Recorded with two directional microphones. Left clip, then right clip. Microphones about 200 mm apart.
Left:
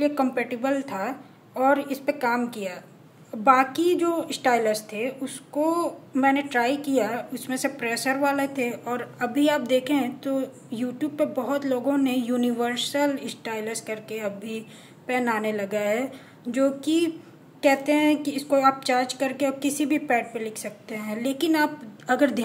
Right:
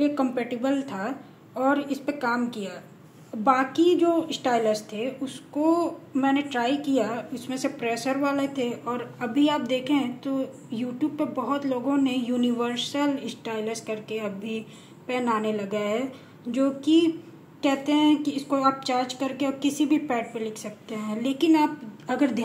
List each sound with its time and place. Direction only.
0.0 s a woman's voice: 10° left (ahead or behind)